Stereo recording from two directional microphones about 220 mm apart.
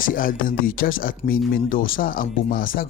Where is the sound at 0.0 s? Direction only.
40° left (ahead or behind).